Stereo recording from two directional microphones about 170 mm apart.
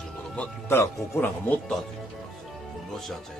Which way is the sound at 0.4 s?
15° left (ahead or behind).